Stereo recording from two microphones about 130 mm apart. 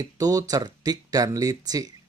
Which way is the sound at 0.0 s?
30° right (ahead or behind).